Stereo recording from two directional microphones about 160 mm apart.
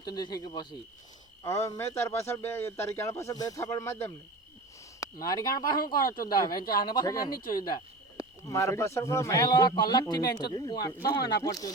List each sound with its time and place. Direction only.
0.0 s a man's voice: 25° left (ahead or behind)